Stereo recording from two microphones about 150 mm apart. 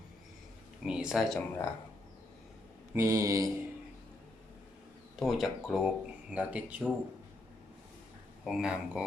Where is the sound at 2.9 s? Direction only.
20° right (ahead or behind).